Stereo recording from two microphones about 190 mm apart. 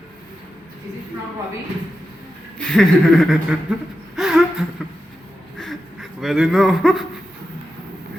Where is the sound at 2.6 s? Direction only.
5° left (ahead or behind).